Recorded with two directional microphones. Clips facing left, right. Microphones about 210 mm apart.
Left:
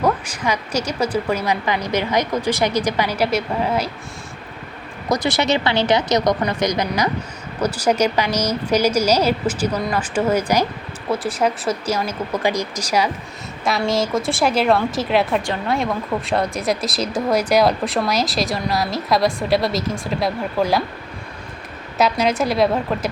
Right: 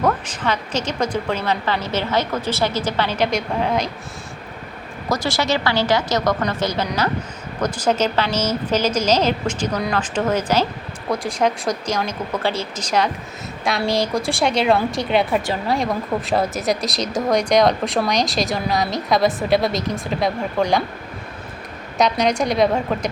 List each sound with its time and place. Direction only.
0.0 s a woman's voice: 10° left (ahead or behind)
5.0 s a woman's voice: 15° left (ahead or behind)
21.9 s speech: 5° left (ahead or behind)